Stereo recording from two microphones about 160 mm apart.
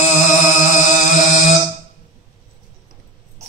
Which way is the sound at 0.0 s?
50° left (ahead or behind).